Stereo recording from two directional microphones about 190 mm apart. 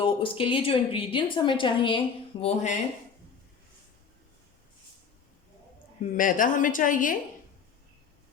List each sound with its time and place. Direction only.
0.0 s a woman's voice: 25° left (ahead or behind)
6.1 s a woman's voice: 45° left (ahead or behind)